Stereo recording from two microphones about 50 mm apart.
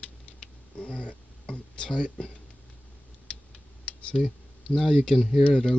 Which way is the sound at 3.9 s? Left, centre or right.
Left.